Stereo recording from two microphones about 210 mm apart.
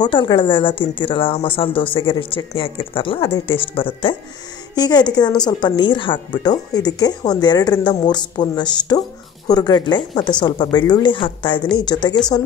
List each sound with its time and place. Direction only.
0.0 s speech: 20° left (ahead or behind)